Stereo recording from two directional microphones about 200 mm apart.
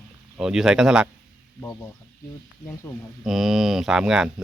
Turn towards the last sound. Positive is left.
turn(degrees=-5)  # may be behind; listen again after turning